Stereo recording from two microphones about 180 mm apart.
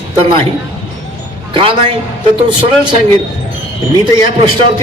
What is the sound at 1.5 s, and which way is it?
Speech, 30° right (ahead or behind).